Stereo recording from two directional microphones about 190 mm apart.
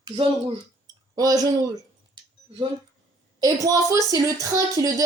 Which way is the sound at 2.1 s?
25° right (ahead or behind).